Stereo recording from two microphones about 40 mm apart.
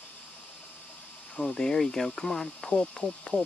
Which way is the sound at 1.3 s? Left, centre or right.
Left.